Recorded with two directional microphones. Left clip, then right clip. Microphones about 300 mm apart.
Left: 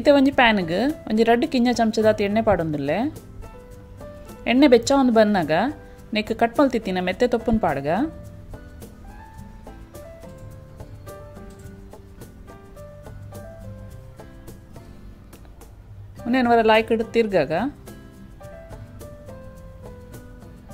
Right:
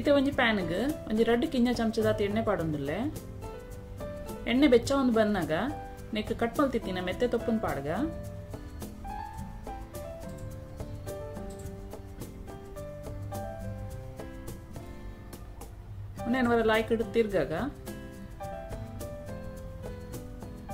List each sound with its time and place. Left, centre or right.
0.0 s speech: left
4.5 s speech: left
16.3 s speech: left